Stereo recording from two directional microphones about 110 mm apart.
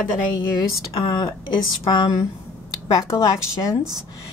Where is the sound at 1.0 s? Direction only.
45° left (ahead or behind).